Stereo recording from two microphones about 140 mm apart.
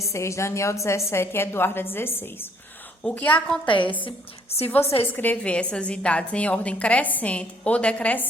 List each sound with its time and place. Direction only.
0.1 s a woman's voice: 20° left (ahead or behind)
3.7 s a woman's voice: 35° left (ahead or behind)
5.1 s a woman's voice: 10° left (ahead or behind)